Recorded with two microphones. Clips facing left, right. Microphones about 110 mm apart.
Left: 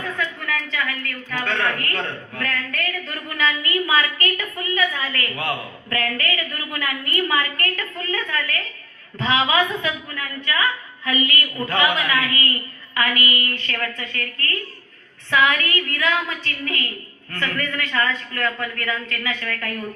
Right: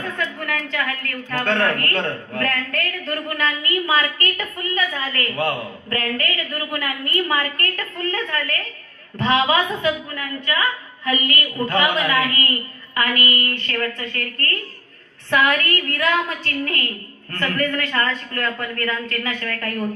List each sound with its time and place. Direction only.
0.3 s a woman's voice: 55° right (ahead or behind)